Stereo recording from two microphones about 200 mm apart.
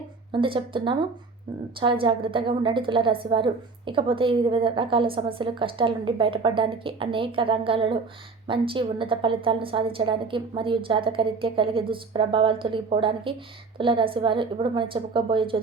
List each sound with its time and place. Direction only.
0.3 s a woman's voice: 25° right (ahead or behind)